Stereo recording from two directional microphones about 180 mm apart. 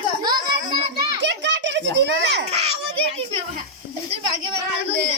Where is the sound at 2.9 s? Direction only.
35° right (ahead or behind).